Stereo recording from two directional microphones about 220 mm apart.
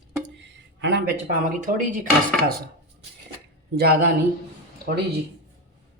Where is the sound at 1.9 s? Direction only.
35° right (ahead or behind).